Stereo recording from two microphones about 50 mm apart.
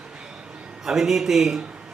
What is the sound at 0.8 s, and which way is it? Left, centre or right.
Speech, centre.